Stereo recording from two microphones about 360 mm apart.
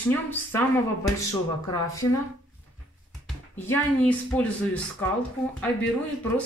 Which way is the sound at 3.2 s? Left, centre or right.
Centre.